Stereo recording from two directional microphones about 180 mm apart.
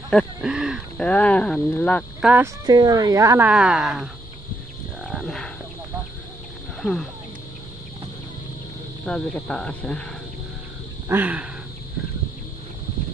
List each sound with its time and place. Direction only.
0.1 s speech: centre (ahead or behind)
2.2 s speech: 15° right (ahead or behind)
5.0 s a sound: centre (ahead or behind)
6.8 s speech: centre (ahead or behind)
9.0 s speech: 5° left (ahead or behind)
11.1 s speech: 10° right (ahead or behind)